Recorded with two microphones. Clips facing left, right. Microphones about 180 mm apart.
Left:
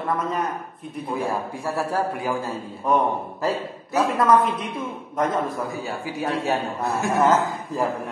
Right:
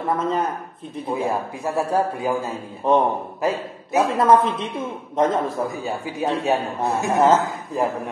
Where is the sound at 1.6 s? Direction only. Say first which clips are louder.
Right 4 dB; 20° right (ahead or behind).